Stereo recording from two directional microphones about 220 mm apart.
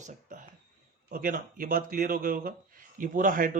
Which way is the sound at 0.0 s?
35° right (ahead or behind).